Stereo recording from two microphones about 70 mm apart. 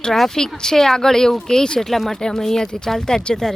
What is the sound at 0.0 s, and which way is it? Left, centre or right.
Speech, centre.